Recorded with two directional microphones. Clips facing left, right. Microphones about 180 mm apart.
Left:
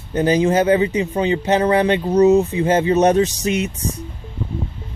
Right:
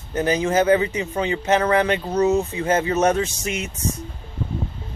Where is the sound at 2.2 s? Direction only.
15° left (ahead or behind).